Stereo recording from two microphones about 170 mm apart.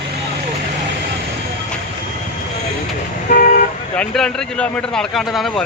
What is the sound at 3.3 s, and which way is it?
Speech, 60° left (ahead or behind).